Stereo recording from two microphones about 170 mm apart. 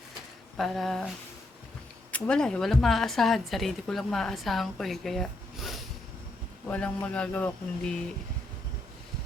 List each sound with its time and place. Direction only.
0.5 s speech: centre (ahead or behind)
2.1 s speech: 5° left (ahead or behind)